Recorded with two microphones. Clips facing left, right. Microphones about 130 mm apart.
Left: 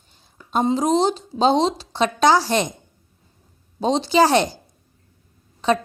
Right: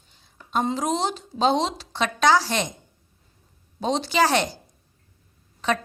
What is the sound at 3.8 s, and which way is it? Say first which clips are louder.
Speech: left 5 dB; 30° left (ahead or behind).